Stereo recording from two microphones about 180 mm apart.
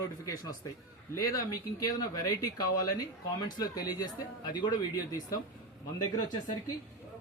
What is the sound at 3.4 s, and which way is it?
Speech, 20° left (ahead or behind).